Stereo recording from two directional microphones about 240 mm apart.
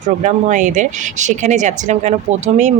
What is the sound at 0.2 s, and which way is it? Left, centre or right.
Speech, right.